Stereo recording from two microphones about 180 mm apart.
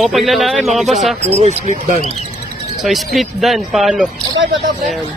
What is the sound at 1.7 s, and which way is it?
Speech, 45° right (ahead or behind).